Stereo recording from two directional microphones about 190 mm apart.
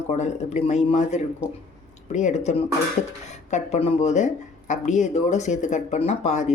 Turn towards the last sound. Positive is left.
turn(degrees=35)  # may be behind; listen again after turning